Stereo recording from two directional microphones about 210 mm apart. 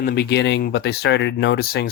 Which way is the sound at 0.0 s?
50° left (ahead or behind).